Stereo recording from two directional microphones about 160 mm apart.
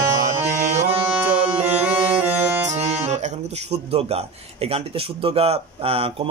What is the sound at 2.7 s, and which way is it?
A man's voice, 45° right (ahead or behind).